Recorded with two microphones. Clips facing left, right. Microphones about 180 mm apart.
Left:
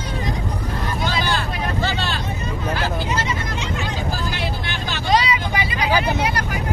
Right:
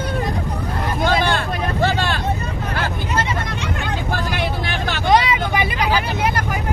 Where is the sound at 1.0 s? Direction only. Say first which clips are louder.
Right 6 dB; 55° right (ahead or behind).